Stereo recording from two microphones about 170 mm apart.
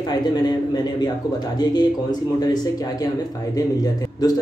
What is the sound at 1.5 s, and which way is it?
Speech, 25° left (ahead or behind).